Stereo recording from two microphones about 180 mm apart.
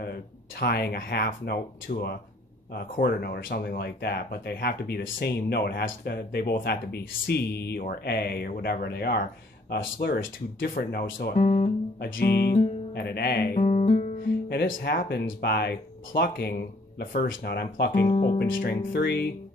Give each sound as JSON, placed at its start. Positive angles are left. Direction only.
{"t": 0.0, "sound": "speech", "side_deg": 65}
{"t": 12.0, "sound": "speech", "side_deg": 60}
{"t": 13.6, "sound": "guitar", "side_deg": 40}
{"t": 14.5, "sound": "speech", "side_deg": 65}
{"t": 18.0, "sound": "guitar", "side_deg": 35}
{"t": 18.4, "sound": "speech", "side_deg": 60}